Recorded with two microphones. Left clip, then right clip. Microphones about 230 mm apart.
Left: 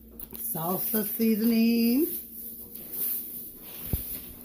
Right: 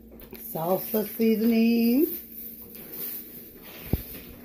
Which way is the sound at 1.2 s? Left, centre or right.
Left.